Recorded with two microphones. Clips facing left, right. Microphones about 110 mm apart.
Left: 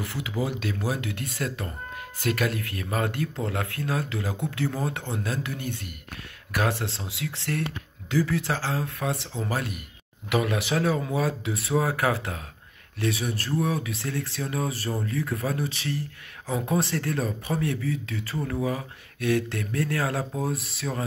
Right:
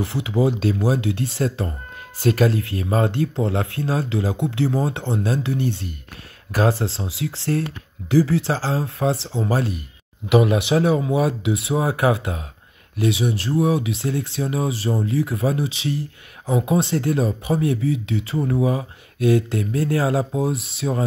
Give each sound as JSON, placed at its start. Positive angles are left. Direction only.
{"t": 0.0, "sound": "speech", "side_deg": -25}